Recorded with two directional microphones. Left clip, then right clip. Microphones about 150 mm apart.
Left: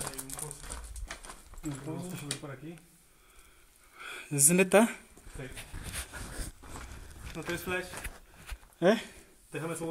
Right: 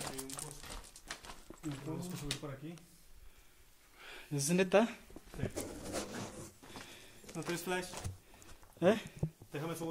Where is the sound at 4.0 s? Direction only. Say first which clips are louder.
Left 9 dB; 45° left (ahead or behind); by 4.9 s 60° left (ahead or behind).